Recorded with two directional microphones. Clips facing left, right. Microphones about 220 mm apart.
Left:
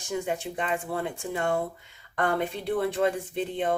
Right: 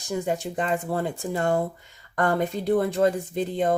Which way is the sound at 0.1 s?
40° right (ahead or behind).